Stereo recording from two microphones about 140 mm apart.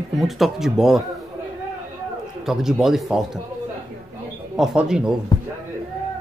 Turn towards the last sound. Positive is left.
turn(degrees=30)  # may be behind; listen again after turning